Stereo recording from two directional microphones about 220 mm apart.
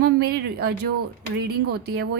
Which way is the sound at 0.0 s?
45° right (ahead or behind).